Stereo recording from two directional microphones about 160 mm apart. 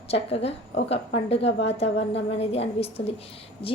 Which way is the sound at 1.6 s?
40° left (ahead or behind).